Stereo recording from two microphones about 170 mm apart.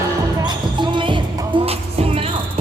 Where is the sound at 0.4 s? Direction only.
30° right (ahead or behind).